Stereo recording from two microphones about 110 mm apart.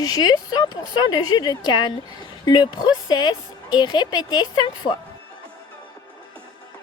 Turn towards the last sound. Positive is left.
turn(degrees=40)  # may be behind; listen again after turning